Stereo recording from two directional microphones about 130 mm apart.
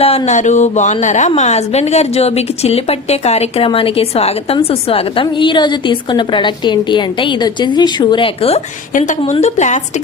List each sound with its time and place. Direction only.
0.0 s a woman's voice: 50° left (ahead or behind)
0.3 s a woman's voice: 65° left (ahead or behind); by 8.6 s 50° left (ahead or behind)
9.0 s a woman's voice: 70° left (ahead or behind)